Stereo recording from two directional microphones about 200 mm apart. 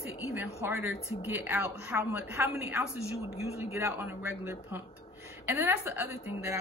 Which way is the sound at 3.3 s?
30° left (ahead or behind).